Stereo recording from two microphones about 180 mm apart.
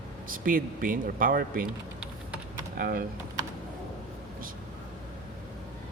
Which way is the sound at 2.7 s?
55° right (ahead or behind).